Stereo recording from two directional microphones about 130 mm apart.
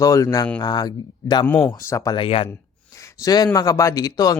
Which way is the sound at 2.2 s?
45° left (ahead or behind).